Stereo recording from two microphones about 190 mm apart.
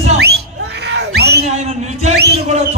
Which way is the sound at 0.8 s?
60° right (ahead or behind).